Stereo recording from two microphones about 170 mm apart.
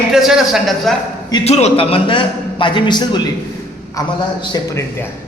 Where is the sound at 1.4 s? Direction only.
40° left (ahead or behind); by 4.1 s 20° left (ahead or behind).